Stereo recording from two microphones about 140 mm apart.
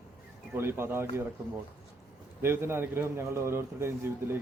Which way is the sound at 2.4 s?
15° right (ahead or behind).